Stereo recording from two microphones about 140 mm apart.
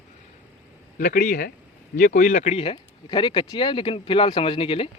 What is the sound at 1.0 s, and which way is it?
Speech, 90° left.